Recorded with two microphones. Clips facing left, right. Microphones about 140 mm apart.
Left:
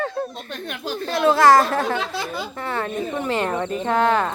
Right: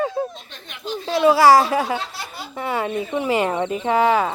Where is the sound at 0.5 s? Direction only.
60° left (ahead or behind).